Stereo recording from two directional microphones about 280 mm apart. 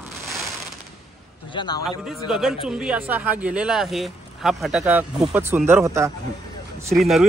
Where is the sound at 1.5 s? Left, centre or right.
Centre.